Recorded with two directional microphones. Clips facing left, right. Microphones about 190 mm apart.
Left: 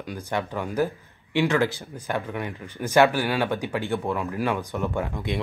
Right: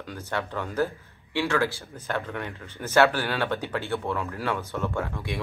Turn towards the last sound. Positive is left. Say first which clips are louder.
# left 2 dB
turn(degrees=15)  # may be behind; listen again after turning